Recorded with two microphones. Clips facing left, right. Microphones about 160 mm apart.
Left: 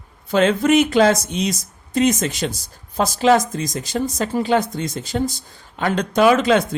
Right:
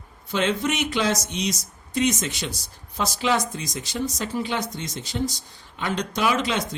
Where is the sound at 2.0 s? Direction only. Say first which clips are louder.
Left 6 dB; 90° left.